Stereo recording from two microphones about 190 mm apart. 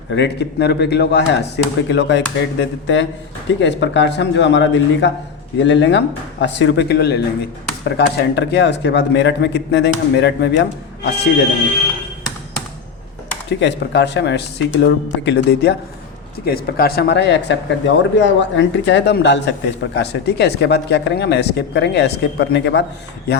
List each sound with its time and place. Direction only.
0.1 s speech: 65° left (ahead or behind)
13.6 s speech: 65° left (ahead or behind)
16.5 s speech: 50° left (ahead or behind)